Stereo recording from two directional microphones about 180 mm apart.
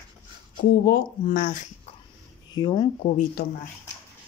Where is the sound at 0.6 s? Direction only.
50° left (ahead or behind).